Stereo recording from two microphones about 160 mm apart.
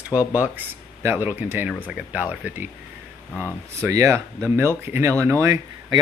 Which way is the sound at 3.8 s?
20° right (ahead or behind).